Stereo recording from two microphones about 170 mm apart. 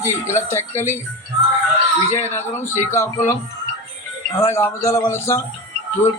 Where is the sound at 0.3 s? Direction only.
15° left (ahead or behind).